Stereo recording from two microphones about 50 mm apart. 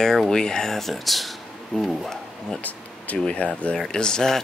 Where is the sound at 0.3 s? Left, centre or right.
Centre.